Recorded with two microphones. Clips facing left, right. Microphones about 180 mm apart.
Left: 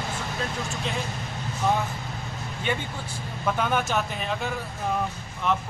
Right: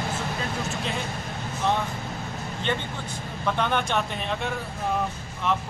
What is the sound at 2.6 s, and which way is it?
A man's voice, 10° left (ahead or behind).